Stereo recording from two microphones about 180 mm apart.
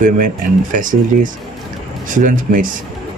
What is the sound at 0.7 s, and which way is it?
Speech, 50° right (ahead or behind).